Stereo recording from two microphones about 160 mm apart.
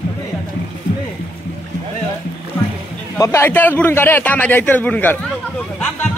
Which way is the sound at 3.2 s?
15° left (ahead or behind).